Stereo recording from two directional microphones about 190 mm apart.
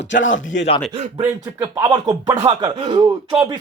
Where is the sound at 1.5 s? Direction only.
20° right (ahead or behind).